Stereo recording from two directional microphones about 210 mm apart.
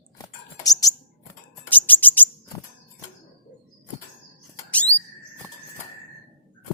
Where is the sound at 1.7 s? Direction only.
10° left (ahead or behind).